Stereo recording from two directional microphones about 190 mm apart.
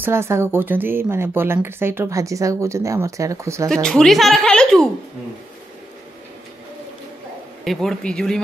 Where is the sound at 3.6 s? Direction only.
5° left (ahead or behind).